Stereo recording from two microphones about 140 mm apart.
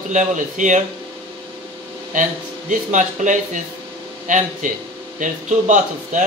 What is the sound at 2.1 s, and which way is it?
A man's voice, 70° right (ahead or behind).